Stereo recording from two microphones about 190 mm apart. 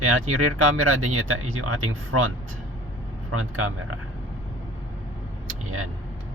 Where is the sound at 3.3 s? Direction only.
90° right.